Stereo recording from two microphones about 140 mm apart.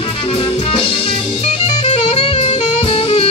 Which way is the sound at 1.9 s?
40° left (ahead or behind).